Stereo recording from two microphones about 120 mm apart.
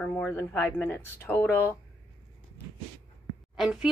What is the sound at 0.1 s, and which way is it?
Speech, 20° left (ahead or behind).